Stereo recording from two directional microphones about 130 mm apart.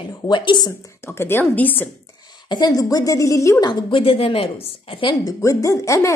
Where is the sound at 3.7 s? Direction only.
40° left (ahead or behind).